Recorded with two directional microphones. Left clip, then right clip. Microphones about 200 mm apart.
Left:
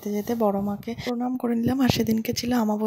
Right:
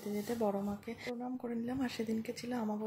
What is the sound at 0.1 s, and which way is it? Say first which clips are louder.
A woman's voice: left 11 dB; 40° left (ahead or behind).